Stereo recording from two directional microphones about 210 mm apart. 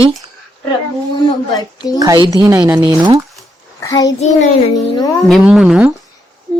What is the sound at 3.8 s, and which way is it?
Speech, 15° left (ahead or behind).